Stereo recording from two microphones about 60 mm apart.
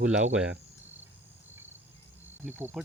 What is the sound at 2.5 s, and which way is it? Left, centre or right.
Cricket, right.